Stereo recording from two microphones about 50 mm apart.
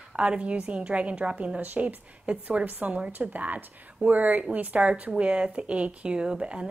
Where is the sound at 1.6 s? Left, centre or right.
Right.